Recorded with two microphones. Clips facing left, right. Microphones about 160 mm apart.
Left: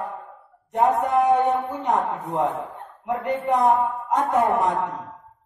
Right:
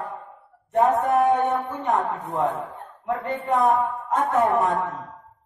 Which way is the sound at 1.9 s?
75° left (ahead or behind).